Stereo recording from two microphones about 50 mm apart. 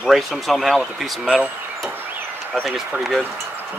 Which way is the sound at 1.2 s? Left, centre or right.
Centre.